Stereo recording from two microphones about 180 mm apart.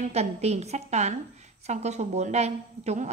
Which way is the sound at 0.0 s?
35° right (ahead or behind).